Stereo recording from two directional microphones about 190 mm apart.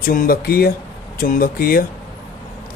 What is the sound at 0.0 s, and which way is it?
A man's voice, 50° left (ahead or behind).